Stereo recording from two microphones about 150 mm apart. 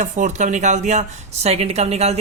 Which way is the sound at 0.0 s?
55° right (ahead or behind).